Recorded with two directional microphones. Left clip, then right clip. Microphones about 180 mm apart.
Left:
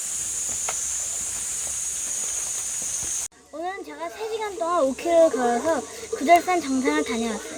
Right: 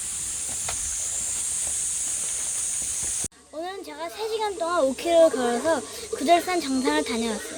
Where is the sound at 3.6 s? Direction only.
20° right (ahead or behind).